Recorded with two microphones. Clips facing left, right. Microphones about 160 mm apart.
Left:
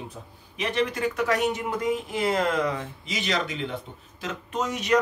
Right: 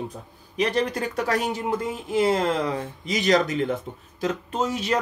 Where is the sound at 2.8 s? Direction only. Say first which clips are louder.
Right 6 dB; 40° right (ahead or behind).